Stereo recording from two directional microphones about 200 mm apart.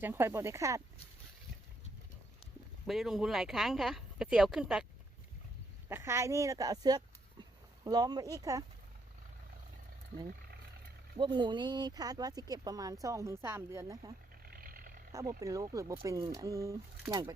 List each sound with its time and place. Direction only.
0.0 s speech: 10° right (ahead or behind)
2.8 s speech: centre (ahead or behind)
5.9 s speech: 15° right (ahead or behind)
11.2 s speech: 25° right (ahead or behind)
14.4 s vehicle: 45° right (ahead or behind)
15.1 s speech: 15° right (ahead or behind)